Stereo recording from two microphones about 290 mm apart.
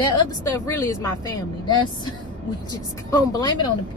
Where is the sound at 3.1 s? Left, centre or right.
Centre.